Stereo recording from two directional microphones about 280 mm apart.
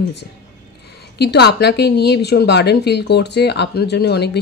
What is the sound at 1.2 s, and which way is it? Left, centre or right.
A woman's voice, left.